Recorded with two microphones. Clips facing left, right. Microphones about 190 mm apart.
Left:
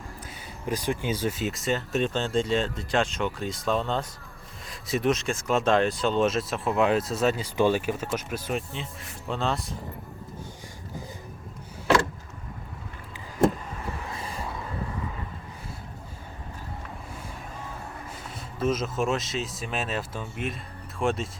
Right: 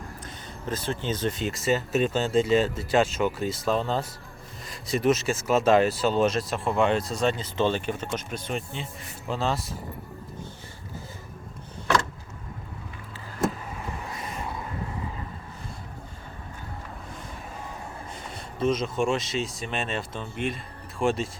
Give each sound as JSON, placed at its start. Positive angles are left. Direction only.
{"t": 0.3, "sound": "speech", "side_deg": 10}
{"t": 14.2, "sound": "vehicle", "side_deg": 30}
{"t": 18.1, "sound": "speech", "side_deg": 5}